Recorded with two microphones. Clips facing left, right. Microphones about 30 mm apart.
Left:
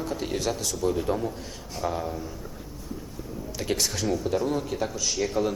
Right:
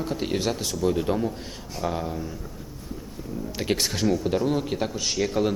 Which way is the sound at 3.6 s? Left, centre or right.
Right.